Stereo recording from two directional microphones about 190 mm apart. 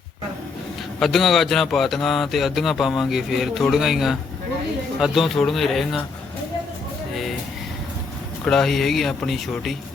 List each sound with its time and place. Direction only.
0.9 s speech: centre (ahead or behind)
8.4 s speech: centre (ahead or behind)